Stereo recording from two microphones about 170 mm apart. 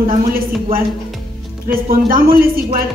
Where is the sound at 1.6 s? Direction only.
60° right (ahead or behind).